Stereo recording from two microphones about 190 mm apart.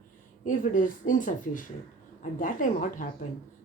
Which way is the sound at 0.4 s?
45° left (ahead or behind).